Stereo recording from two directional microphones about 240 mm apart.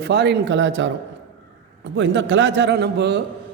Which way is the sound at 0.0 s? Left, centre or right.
Right.